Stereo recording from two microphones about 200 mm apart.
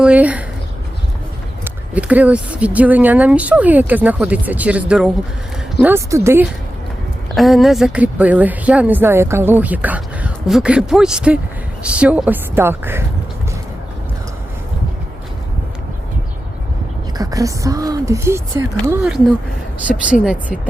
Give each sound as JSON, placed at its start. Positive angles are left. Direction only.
{"t": 0.0, "sound": "speech", "side_deg": -5}
{"t": 1.6, "sound": "speech", "side_deg": -5}
{"t": 7.3, "sound": "speech", "side_deg": 0}
{"t": 17.2, "sound": "speech", "side_deg": -15}
{"t": 18.9, "sound": "speech", "side_deg": -5}